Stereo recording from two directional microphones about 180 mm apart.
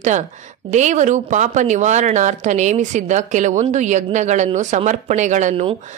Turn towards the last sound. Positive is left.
turn(degrees=-35)  # may be behind; listen again after turning